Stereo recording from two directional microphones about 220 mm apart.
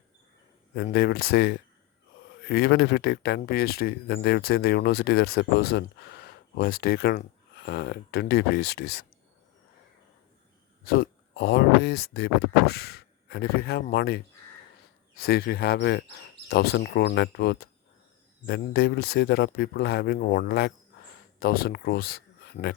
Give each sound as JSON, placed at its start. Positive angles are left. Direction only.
{"t": 0.9, "sound": "speech", "side_deg": 45}
{"t": 10.8, "sound": "speech", "side_deg": 45}
{"t": 15.2, "sound": "speech", "side_deg": 45}